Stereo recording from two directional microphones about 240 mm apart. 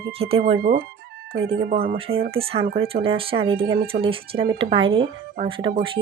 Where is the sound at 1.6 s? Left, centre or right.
Right.